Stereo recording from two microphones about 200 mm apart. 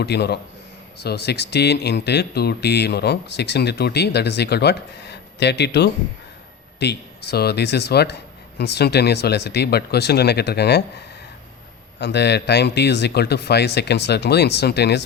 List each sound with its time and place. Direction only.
0.0 s speech: 55° left (ahead or behind)
11.9 s speech: 60° left (ahead or behind)